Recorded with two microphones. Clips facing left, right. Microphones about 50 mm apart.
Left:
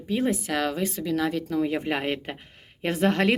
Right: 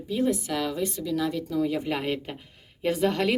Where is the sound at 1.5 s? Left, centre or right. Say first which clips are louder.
Left 1 dB; left.